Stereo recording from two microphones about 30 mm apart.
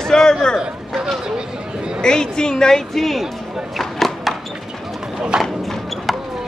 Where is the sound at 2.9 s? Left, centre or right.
Centre.